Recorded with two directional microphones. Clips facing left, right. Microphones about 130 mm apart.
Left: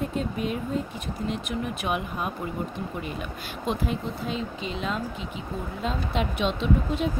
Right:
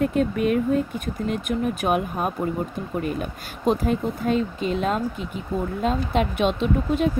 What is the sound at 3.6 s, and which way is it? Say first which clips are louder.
Speech: right 7 dB; 45° right (ahead or behind).